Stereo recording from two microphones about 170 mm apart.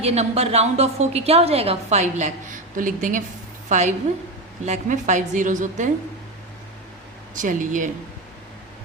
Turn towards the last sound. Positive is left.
turn(degrees=-50)  # may be behind; listen again after turning